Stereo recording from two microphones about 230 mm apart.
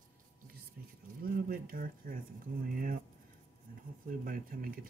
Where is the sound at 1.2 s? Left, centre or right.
Right.